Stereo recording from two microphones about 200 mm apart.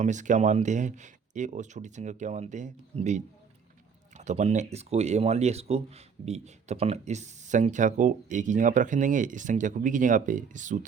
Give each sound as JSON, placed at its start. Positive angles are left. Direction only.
{"t": 0.0, "sound": "speech", "side_deg": -40}